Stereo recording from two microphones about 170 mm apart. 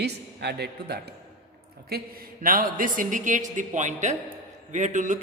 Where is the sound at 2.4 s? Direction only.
55° right (ahead or behind).